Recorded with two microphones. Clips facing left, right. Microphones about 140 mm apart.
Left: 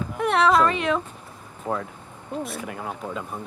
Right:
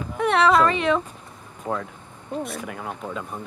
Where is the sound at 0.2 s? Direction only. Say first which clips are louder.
Right 1 dB; centre (ahead or behind).